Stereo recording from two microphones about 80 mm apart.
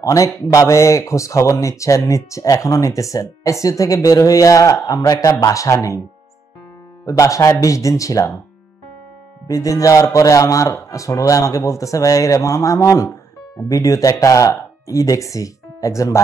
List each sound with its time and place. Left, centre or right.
0.0 s speech: left
7.1 s speech: left
9.5 s speech: left